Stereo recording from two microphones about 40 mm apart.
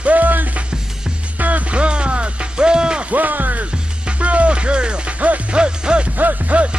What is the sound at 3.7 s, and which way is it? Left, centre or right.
Music, right.